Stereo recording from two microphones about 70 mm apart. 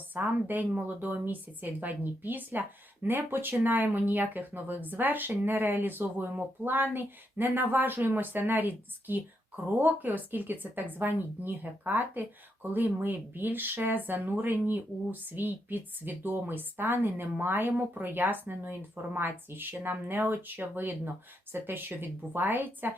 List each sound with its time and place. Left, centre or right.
0.1 s speech: right